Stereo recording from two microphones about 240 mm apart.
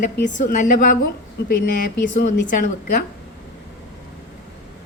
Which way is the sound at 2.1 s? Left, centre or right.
Left.